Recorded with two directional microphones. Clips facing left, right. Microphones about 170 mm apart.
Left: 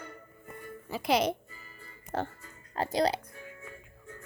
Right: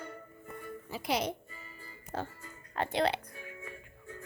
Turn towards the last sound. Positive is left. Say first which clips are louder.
# left 2 dB
turn(degrees=35)  # may be behind; listen again after turning